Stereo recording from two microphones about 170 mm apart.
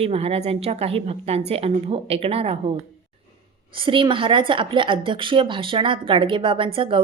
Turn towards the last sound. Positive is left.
turn(degrees=-30)  # may be behind; listen again after turning